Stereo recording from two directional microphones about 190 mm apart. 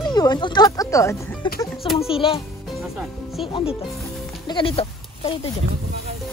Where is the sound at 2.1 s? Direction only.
30° left (ahead or behind).